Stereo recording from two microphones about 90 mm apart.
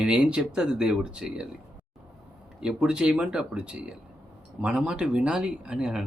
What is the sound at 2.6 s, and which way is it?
Speech, 10° right (ahead or behind).